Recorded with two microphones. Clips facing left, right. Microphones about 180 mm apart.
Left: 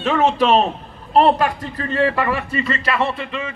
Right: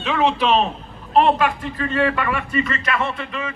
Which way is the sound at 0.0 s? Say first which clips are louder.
Left 3 dB; 45° left (ahead or behind).